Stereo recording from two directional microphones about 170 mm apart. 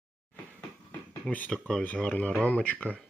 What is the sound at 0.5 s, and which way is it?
Speech, 5° left (ahead or behind).